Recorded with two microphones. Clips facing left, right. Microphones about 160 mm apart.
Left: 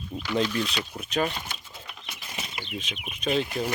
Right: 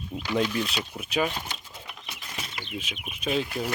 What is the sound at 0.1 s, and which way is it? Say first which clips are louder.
Speech: even; 10° right (ahead or behind).